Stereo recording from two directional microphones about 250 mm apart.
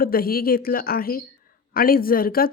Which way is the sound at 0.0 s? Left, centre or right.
Left.